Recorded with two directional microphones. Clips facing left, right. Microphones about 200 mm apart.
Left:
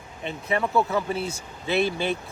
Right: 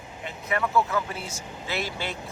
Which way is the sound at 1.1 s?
60° left (ahead or behind).